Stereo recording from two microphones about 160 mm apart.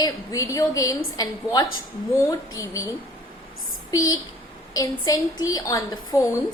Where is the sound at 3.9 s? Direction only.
20° left (ahead or behind).